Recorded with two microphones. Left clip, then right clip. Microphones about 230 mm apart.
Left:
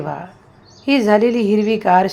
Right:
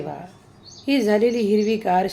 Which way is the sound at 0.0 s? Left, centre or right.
Centre.